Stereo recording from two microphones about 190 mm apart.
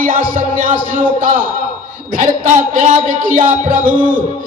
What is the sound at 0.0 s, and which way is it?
Music, 45° right (ahead or behind).